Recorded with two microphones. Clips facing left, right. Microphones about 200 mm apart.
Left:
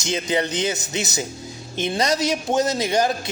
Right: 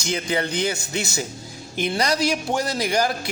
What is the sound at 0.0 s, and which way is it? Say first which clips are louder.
A man's voice: left 2 dB; 20° left (ahead or behind).